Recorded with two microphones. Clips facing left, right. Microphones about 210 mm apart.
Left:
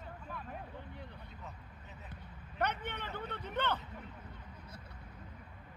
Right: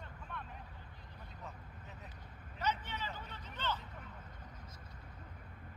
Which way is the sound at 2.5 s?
60° left (ahead or behind).